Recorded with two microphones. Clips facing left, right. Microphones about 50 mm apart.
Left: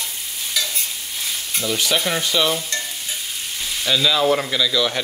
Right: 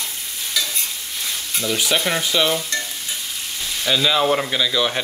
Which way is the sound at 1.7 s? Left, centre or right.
Centre.